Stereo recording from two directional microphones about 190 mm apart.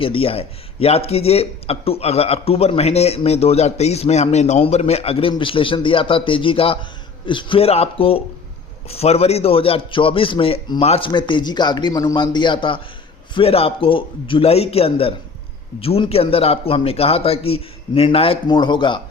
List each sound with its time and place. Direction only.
0.0 s a man's voice: 30° left (ahead or behind)